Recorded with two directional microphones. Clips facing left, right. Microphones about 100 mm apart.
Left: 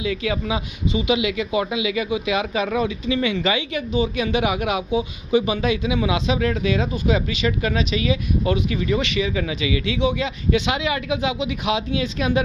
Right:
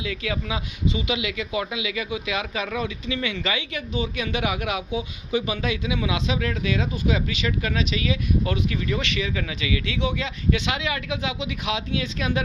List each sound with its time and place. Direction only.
0.0 s speech: 25° left (ahead or behind)
4.9 s speech: 30° left (ahead or behind)